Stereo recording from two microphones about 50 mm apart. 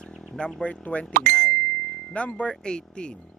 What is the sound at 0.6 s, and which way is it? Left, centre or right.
Speech, left.